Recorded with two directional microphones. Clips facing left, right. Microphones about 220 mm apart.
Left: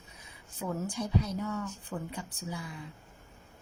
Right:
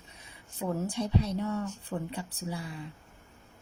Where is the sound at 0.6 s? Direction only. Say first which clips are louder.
Right 3 dB; 30° right (ahead or behind).